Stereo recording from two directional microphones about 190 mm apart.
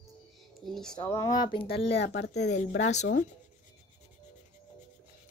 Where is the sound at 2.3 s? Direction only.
40° left (ahead or behind).